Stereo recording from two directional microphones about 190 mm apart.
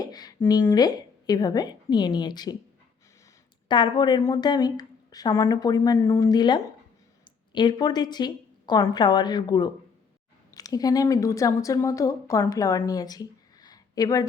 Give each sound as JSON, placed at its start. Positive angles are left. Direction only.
{"t": 0.0, "sound": "a woman's voice", "side_deg": 20}
{"t": 3.7, "sound": "a woman's voice", "side_deg": 25}